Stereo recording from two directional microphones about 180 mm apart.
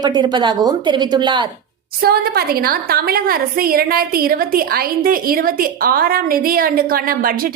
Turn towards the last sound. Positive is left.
turn(degrees=-55)  # may be behind; listen again after turning